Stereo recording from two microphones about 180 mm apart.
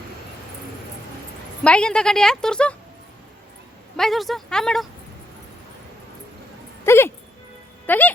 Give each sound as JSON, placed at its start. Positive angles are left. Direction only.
{"t": 1.6, "sound": "speech", "side_deg": 5}
{"t": 3.9, "sound": "speech", "side_deg": 0}
{"t": 6.8, "sound": "music", "side_deg": 15}
{"t": 7.9, "sound": "speech", "side_deg": 10}